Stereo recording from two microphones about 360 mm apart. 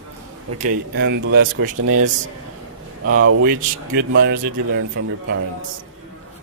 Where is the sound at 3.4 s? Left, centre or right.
Right.